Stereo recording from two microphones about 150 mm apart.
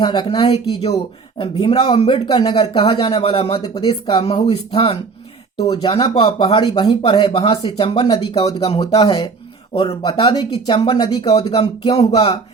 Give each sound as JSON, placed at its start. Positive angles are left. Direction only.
{"t": 0.0, "sound": "speech", "side_deg": 30}
{"t": 0.3, "sound": "speech", "side_deg": 40}
{"t": 3.6, "sound": "speech", "side_deg": 30}
{"t": 4.2, "sound": "speech", "side_deg": 40}
{"t": 5.5, "sound": "speech", "side_deg": 25}
{"t": 7.3, "sound": "speech", "side_deg": 40}
{"t": 8.0, "sound": "speech", "side_deg": 25}